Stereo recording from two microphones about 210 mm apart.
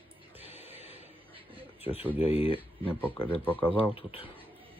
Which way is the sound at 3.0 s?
10° left (ahead or behind).